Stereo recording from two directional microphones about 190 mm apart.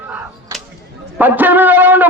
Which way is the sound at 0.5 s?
15° right (ahead or behind).